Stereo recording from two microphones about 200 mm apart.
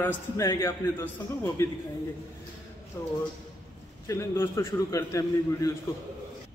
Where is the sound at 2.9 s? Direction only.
10° left (ahead or behind).